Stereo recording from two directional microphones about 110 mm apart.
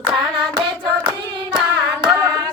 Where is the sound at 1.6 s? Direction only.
5° right (ahead or behind).